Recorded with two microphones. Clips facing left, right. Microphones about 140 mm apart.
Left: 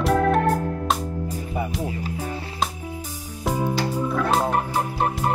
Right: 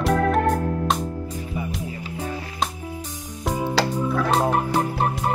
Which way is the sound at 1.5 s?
60° left (ahead or behind).